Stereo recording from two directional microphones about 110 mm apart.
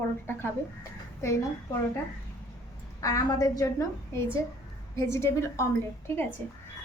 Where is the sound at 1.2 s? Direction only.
25° left (ahead or behind).